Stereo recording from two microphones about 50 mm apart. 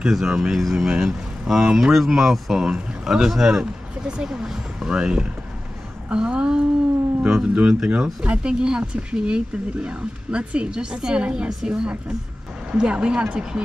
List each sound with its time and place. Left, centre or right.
0.0 s speech: centre
0.9 s speech: centre